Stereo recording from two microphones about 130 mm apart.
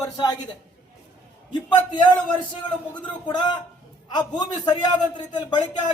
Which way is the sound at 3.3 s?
35° left (ahead or behind).